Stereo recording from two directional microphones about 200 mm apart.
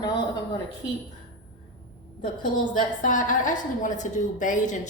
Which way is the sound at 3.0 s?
40° left (ahead or behind).